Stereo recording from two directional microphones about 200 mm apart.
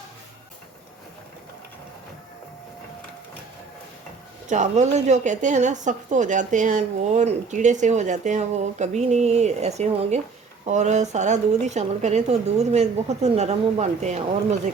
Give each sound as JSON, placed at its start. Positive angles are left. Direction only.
{"t": 4.4, "sound": "speech", "side_deg": -35}